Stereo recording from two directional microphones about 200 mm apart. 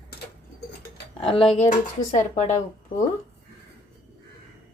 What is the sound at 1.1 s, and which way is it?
Speech, 25° left (ahead or behind).